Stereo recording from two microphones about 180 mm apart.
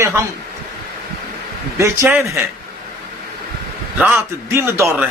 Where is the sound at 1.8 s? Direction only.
10° right (ahead or behind).